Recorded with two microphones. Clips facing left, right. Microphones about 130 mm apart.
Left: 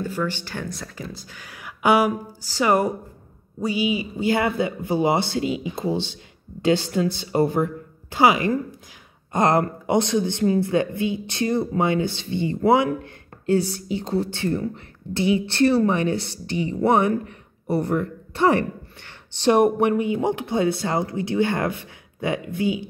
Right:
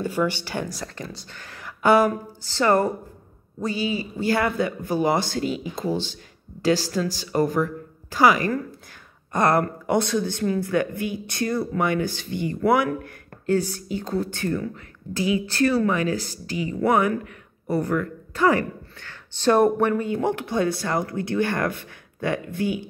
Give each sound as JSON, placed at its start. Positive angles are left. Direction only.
{"t": 0.0, "sound": "a man's voice", "side_deg": -15}